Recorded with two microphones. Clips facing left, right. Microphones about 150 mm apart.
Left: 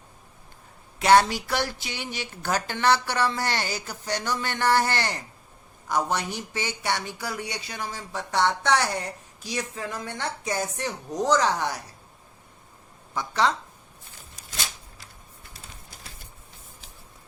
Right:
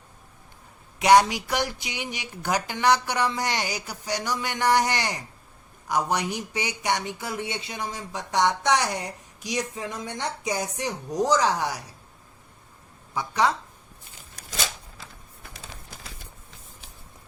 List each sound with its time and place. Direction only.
0.9 s speech: 15° right (ahead or behind)
13.1 s speech: 10° right (ahead or behind)
14.3 s a sound: 90° right